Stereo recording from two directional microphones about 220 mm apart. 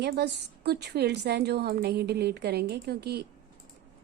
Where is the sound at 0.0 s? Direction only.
50° right (ahead or behind).